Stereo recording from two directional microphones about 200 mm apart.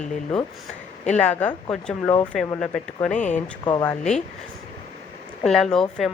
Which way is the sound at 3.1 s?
35° left (ahead or behind).